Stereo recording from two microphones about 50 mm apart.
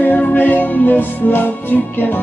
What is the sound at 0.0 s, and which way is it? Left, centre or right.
Music, left.